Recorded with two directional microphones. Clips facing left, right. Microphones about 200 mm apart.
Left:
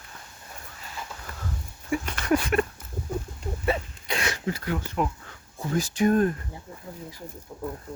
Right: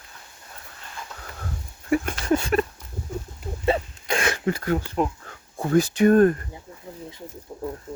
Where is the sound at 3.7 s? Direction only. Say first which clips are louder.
Right 4 dB; 25° right (ahead or behind).